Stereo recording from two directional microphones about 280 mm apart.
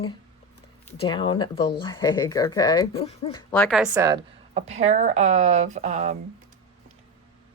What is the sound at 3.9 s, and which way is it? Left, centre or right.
Speech, centre.